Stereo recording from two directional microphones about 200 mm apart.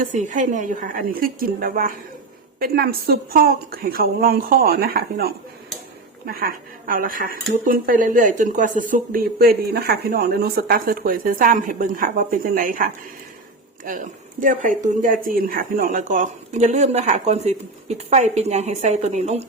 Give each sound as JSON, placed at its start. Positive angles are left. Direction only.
{"t": 0.0, "sound": "speech", "side_deg": -40}